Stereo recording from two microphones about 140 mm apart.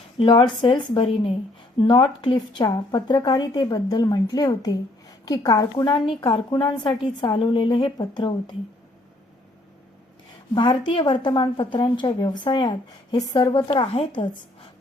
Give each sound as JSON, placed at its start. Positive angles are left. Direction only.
{"t": 0.2, "sound": "a woman's voice", "side_deg": 35}
{"t": 10.5, "sound": "a woman's voice", "side_deg": 35}